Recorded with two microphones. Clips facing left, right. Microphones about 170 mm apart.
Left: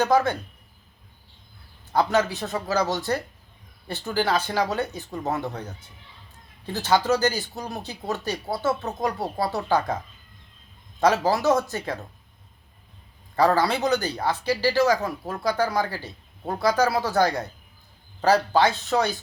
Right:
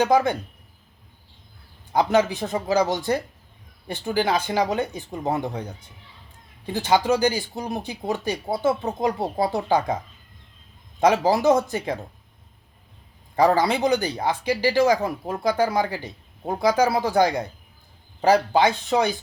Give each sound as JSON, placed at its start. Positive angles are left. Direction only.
{"t": 0.0, "sound": "speech", "side_deg": -15}
{"t": 1.9, "sound": "speech", "side_deg": -15}
{"t": 11.0, "sound": "speech", "side_deg": -15}
{"t": 13.3, "sound": "speech", "side_deg": -15}